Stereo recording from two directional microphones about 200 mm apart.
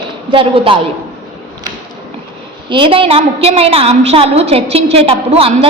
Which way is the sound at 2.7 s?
25° right (ahead or behind).